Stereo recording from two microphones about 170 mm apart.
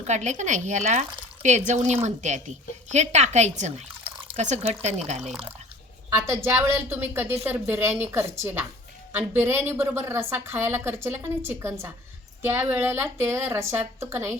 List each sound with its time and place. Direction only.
0.1 s speech: 45° right (ahead or behind)
6.1 s a woman's voice: 15° right (ahead or behind)